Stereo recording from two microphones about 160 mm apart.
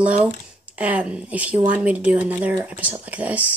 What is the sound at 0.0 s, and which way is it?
Speech, 10° right (ahead or behind).